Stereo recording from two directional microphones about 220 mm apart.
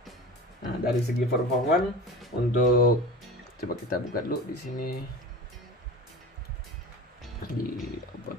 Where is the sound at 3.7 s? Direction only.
40° left (ahead or behind).